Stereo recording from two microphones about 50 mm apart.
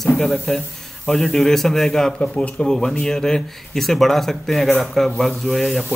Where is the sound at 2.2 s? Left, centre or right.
Left.